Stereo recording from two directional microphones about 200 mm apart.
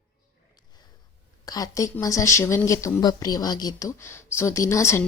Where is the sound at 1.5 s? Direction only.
20° left (ahead or behind).